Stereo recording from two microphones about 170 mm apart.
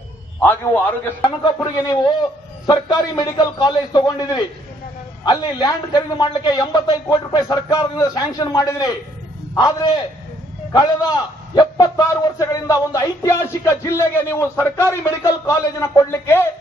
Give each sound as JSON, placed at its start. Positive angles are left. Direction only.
{"t": 0.4, "sound": "a man's voice", "side_deg": 10}
{"t": 1.2, "sound": "a man's voice", "side_deg": 25}